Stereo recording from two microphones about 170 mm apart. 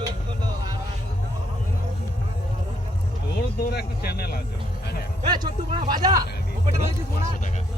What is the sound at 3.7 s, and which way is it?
Speech, 70° left (ahead or behind).